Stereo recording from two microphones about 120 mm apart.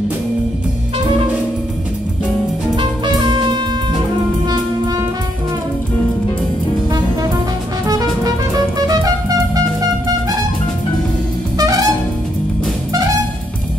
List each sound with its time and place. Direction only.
2.7 s music: 35° right (ahead or behind)
7.8 s music: 30° right (ahead or behind)
11.5 s music: 30° right (ahead or behind)